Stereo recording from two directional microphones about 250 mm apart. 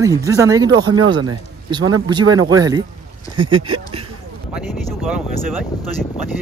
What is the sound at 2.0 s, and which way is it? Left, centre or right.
A man's voice, centre.